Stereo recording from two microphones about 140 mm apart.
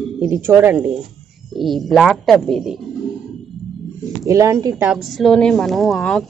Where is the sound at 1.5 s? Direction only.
Centre (ahead or behind).